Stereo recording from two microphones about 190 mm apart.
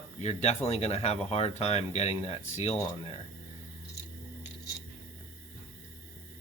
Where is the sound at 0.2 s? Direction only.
35° left (ahead or behind).